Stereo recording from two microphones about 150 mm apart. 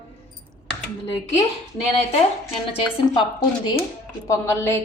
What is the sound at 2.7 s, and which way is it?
A woman's voice, 35° left (ahead or behind).